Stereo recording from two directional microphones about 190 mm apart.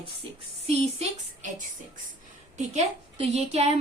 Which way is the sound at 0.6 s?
35° right (ahead or behind).